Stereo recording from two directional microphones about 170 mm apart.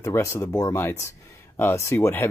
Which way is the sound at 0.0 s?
15° left (ahead or behind).